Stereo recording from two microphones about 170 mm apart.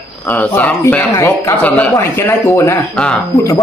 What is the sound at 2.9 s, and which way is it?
Speech, 5° left (ahead or behind).